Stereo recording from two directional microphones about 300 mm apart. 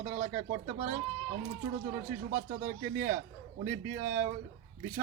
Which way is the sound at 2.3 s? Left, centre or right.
Right.